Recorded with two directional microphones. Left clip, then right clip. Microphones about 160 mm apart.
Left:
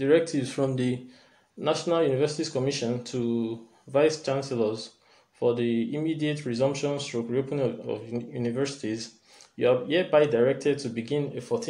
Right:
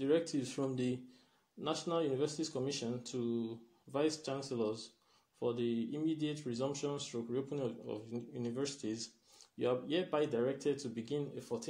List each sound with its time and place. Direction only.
0.0 s speech: 20° right (ahead or behind)